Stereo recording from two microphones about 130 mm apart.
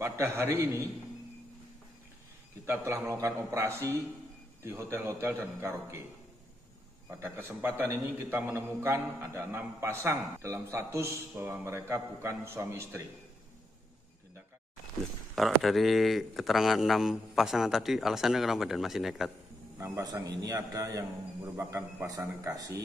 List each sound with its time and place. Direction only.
0.0 s a man's voice: 20° right (ahead or behind)
2.6 s a man's voice: 20° right (ahead or behind)
7.1 s a man's voice: 20° right (ahead or behind)
15.3 s speech: centre (ahead or behind)
19.8 s a man's voice: 30° right (ahead or behind)